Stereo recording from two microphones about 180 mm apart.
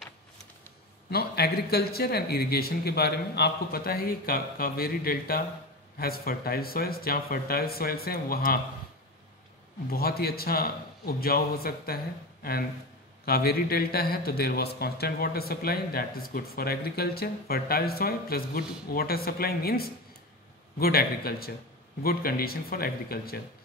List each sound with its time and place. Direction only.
1.1 s a man's voice: 60° left (ahead or behind)
9.8 s a man's voice: 55° left (ahead or behind)
13.2 s a man's voice: 60° left (ahead or behind)